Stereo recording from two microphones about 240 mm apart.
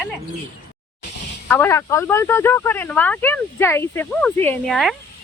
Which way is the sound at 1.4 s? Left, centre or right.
Centre.